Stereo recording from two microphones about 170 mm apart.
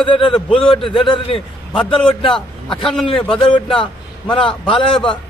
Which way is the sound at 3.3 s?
30° left (ahead or behind).